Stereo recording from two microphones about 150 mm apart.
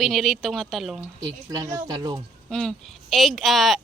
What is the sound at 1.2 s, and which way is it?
Speech, 25° right (ahead or behind).